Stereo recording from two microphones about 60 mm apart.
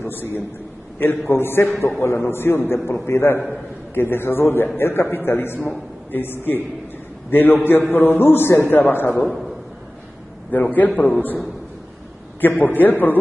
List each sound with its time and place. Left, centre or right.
0.0 s a man's voice: left
5.6 s a man's voice: left
6.2 s a man's voice: left
9.2 s a man's voice: centre
10.5 s a man's voice: left